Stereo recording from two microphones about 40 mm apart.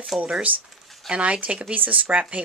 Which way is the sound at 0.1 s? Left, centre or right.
Centre.